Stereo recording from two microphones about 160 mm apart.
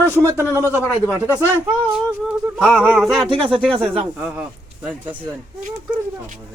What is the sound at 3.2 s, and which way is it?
Speech, 35° right (ahead or behind).